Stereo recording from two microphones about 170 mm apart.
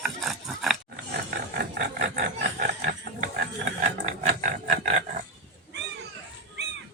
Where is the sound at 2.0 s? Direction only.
60° right (ahead or behind).